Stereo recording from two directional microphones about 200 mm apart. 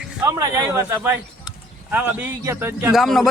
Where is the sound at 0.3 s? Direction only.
15° right (ahead or behind).